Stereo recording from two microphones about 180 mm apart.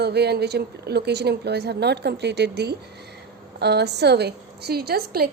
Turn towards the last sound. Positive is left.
turn(degrees=-60)  # may be behind; listen again after turning